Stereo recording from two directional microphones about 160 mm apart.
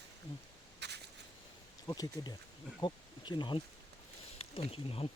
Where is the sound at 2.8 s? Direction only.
30° left (ahead or behind).